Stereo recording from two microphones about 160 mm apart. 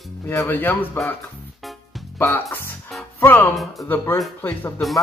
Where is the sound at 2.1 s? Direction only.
15° left (ahead or behind).